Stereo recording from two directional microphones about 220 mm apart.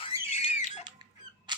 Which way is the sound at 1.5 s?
20° right (ahead or behind).